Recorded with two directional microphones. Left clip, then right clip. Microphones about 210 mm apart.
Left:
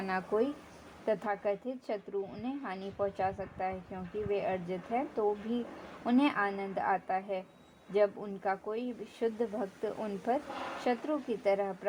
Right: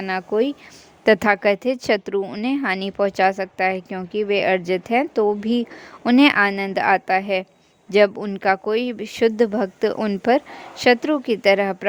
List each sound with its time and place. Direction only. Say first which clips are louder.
0.0 s speech: right 11 dB; 35° right (ahead or behind)
1.0 s speech: right 16 dB; 55° right (ahead or behind)